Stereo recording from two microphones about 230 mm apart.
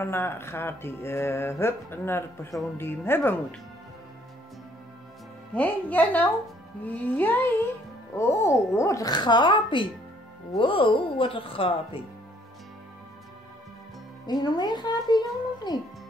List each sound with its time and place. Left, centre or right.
0.0 s music: centre
5.5 s music: centre
8.7 s speech: centre
14.2 s music: centre